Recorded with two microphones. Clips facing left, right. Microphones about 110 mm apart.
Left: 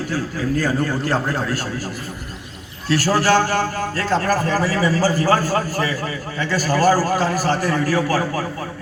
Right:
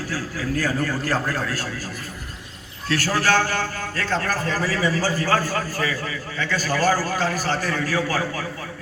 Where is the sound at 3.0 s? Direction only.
30° left (ahead or behind).